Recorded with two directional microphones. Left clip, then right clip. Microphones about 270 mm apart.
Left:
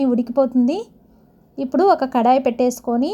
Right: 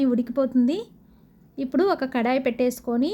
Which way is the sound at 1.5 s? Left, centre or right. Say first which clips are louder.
Left 7 dB; centre.